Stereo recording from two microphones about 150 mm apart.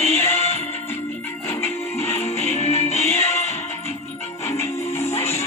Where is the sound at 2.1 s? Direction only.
45° left (ahead or behind).